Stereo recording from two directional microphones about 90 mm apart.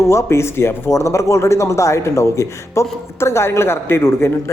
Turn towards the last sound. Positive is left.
turn(degrees=25)  # may be behind; listen again after turning